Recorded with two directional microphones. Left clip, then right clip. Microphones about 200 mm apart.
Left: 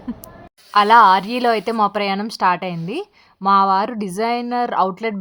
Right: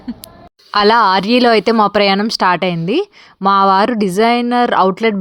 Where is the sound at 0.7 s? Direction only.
25° right (ahead or behind).